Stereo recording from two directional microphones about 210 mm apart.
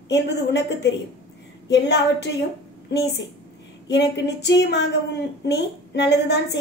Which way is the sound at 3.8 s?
55° left (ahead or behind).